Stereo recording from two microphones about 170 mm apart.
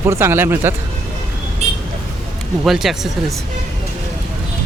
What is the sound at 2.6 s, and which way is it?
Speech, centre (ahead or behind).